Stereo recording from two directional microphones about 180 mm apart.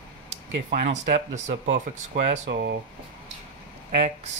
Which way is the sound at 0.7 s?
45° right (ahead or behind).